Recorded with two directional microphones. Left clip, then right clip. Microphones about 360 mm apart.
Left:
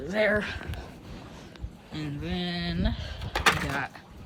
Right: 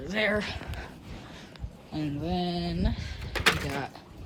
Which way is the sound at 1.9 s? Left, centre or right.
Right.